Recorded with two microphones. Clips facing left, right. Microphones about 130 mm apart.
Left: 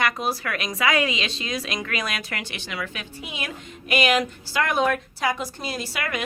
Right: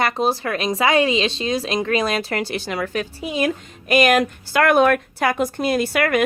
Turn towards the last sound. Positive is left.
turn(degrees=-55)  # may be behind; listen again after turning